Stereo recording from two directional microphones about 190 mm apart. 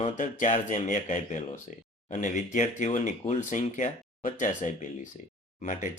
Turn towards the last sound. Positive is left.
turn(degrees=40)  # may be behind; listen again after turning